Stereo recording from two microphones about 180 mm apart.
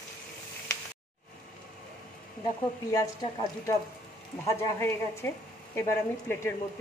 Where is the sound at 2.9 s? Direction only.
20° left (ahead or behind).